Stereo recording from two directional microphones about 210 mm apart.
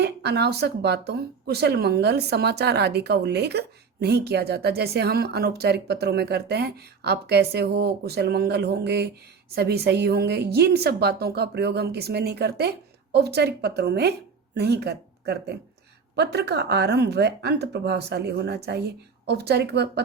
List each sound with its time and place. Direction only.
0.0 s speech: 50° right (ahead or behind)